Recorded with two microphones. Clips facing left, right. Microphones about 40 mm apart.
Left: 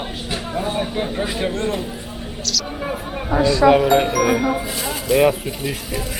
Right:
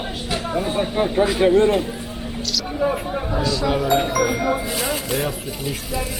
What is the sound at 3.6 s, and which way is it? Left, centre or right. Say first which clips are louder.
Speech: left 11 dB; left.